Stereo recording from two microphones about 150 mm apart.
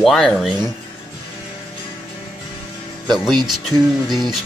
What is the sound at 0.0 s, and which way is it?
Speech, centre (ahead or behind).